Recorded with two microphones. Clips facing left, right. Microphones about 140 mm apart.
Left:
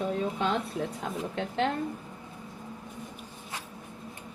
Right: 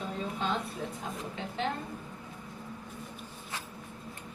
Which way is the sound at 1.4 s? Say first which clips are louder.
Left 9 dB; 70° left (ahead or behind).